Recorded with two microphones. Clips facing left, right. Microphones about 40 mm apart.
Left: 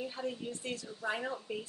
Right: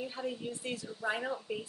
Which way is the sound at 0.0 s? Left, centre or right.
Centre.